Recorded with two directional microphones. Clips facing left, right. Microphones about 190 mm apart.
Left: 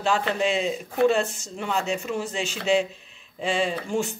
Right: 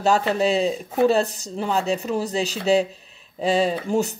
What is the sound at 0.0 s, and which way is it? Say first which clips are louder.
Speech: right 4 dB; 40° right (ahead or behind).